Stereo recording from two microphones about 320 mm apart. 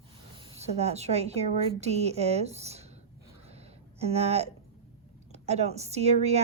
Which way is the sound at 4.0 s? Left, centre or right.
Centre.